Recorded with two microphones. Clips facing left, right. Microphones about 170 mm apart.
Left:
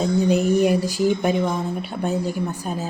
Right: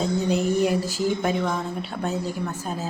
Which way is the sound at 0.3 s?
15° left (ahead or behind).